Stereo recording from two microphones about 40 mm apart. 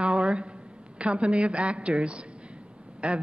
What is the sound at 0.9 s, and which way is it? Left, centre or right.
A woman's voice, right.